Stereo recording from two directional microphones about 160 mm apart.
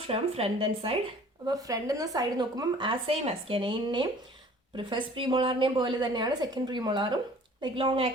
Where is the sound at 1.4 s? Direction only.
20° right (ahead or behind).